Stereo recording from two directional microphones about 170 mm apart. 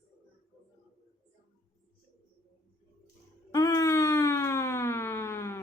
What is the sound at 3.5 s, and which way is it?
Siren, 20° left (ahead or behind).